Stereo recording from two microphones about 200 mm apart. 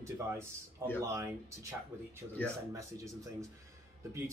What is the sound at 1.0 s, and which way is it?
Speech, 15° right (ahead or behind).